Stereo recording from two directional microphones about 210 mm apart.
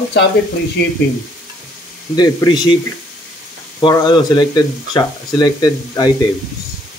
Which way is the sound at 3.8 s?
20° left (ahead or behind).